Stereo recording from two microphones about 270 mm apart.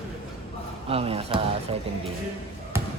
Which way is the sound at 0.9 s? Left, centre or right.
Right.